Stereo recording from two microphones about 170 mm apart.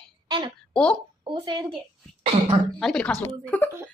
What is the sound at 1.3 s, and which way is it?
Speech, 25° right (ahead or behind).